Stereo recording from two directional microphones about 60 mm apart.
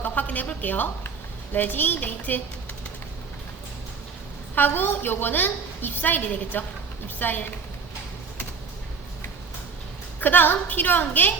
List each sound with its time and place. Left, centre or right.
0.0 s a sound: left
1.5 s a woman's voice: left
4.5 s a woman's voice: left
10.2 s a woman's voice: left